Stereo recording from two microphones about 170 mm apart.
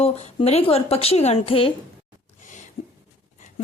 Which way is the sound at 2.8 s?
35° left (ahead or behind).